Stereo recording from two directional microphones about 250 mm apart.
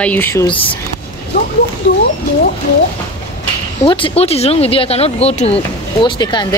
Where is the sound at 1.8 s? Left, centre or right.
Left.